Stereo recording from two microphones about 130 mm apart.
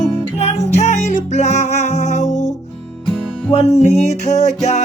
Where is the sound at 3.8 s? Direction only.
60° left (ahead or behind).